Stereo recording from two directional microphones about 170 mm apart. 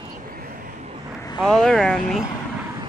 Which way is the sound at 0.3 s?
60° right (ahead or behind).